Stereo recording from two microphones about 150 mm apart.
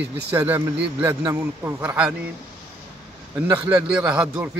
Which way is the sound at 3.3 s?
15° right (ahead or behind).